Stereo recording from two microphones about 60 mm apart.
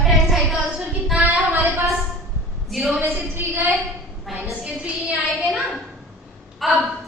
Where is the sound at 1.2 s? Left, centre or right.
Right.